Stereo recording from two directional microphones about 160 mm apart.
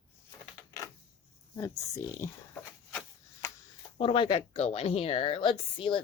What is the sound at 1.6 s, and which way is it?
Speech, 20° left (ahead or behind).